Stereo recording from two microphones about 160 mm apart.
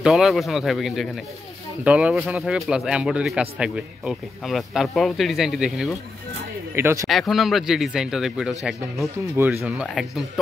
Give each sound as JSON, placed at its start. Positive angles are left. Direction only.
{"t": 0.0, "sound": "speech", "side_deg": 0}
{"t": 6.7, "sound": "speech", "side_deg": -15}
{"t": 7.1, "sound": "speech", "side_deg": 0}